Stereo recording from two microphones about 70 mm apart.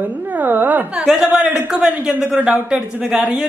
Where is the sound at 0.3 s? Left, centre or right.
Right.